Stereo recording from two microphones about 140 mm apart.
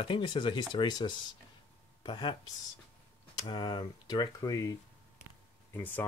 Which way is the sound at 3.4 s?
35° left (ahead or behind).